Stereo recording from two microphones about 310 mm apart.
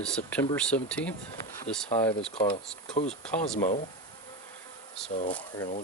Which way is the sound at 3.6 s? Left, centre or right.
Left.